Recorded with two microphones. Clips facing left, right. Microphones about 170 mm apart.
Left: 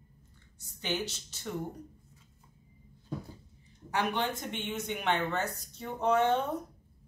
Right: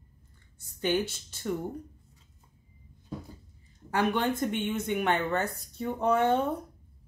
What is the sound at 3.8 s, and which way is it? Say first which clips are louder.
Speech: right 4 dB; 50° right (ahead or behind).